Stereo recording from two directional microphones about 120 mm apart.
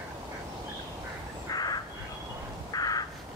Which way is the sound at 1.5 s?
35° left (ahead or behind).